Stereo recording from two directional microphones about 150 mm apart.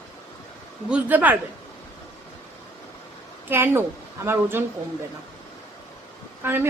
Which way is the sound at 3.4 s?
15° right (ahead or behind).